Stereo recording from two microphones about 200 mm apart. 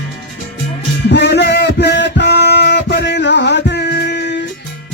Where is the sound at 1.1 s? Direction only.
60° left (ahead or behind).